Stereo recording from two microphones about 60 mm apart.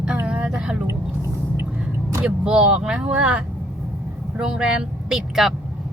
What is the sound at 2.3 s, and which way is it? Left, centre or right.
A man's voice, centre.